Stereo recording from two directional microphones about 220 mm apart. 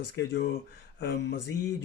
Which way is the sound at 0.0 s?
50° left (ahead or behind).